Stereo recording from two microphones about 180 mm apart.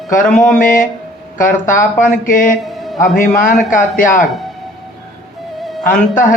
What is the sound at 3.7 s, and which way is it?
Speech, 50° left (ahead or behind).